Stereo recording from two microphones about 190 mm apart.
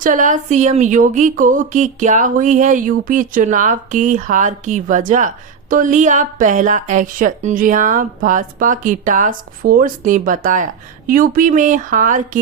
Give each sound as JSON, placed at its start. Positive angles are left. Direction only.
{"t": 0.0, "sound": "speech", "side_deg": -45}